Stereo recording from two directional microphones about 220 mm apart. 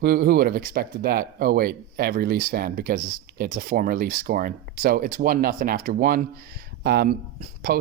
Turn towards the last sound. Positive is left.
turn(degrees=-40)  # may be behind; listen again after turning